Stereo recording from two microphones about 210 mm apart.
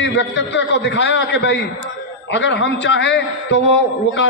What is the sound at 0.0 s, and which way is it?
A man's voice, 60° left (ahead or behind).